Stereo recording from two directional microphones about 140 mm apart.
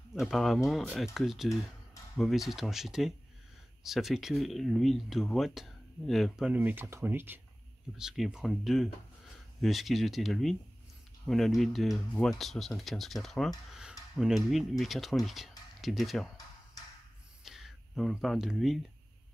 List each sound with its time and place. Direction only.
0.1 s speech: centre (ahead or behind); by 7.3 s 15° right (ahead or behind)
8.0 s speech: 5° right (ahead or behind)
17.4 s a sound: 5° right (ahead or behind)